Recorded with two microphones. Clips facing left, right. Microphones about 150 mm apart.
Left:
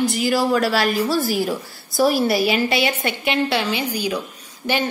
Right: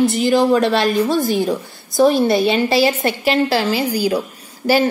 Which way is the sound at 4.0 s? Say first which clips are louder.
Right 6 dB; 35° right (ahead or behind).